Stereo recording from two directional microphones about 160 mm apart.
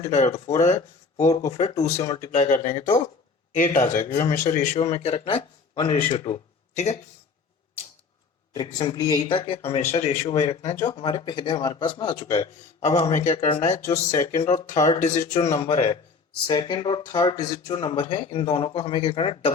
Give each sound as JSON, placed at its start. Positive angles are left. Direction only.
{"t": 0.0, "sound": "speech", "side_deg": 45}
{"t": 1.3, "sound": "speech", "side_deg": 20}
{"t": 2.3, "sound": "speech", "side_deg": 45}
{"t": 8.5, "sound": "speech", "side_deg": 25}
{"t": 10.9, "sound": "speech", "side_deg": 30}
{"t": 16.5, "sound": "speech", "side_deg": 25}